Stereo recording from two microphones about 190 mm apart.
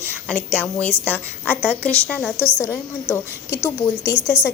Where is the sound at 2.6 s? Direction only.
15° left (ahead or behind).